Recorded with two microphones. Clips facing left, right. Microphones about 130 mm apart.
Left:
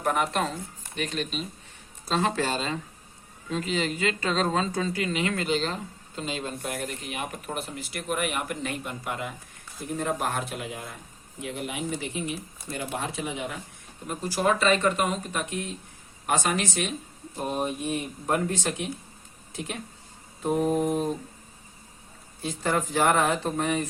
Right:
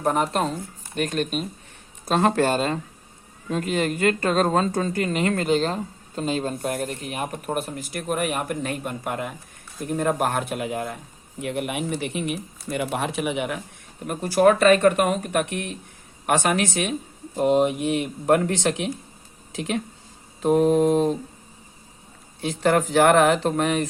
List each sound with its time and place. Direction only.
0.0 s speech: 35° right (ahead or behind)
0.9 s speech: 50° right (ahead or behind); by 13.6 s 75° right (ahead or behind)
14.1 s speech: 60° right (ahead or behind)
17.3 s speech: 90° right
22.4 s speech: 70° right (ahead or behind); by 23.8 s 90° right